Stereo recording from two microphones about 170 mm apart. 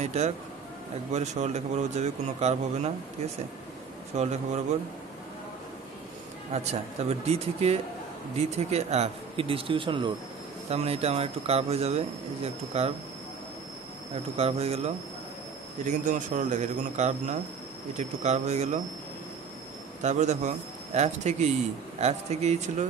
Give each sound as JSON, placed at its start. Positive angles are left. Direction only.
{"t": 0.0, "sound": "speech", "side_deg": -40}
{"t": 4.2, "sound": "speech", "side_deg": -40}
{"t": 6.5, "sound": "speech", "side_deg": -40}
{"t": 14.3, "sound": "speech", "side_deg": -35}
{"t": 15.8, "sound": "a man's voice", "side_deg": -45}
{"t": 20.0, "sound": "a man's voice", "side_deg": -45}